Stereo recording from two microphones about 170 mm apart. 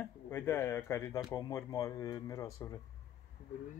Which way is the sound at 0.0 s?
10° left (ahead or behind).